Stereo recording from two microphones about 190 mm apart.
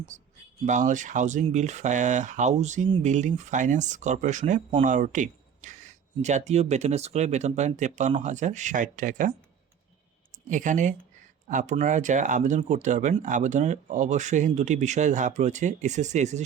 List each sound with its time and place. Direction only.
0.6 s speech: 40° right (ahead or behind)
10.5 s speech: 40° right (ahead or behind)